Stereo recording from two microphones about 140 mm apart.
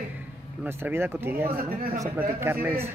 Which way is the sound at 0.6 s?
15° right (ahead or behind).